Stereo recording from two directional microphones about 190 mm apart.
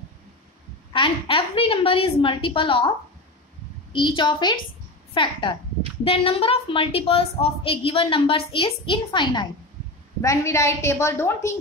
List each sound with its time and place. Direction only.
0.9 s a woman's voice: 25° left (ahead or behind)
3.9 s a woman's voice: 25° left (ahead or behind)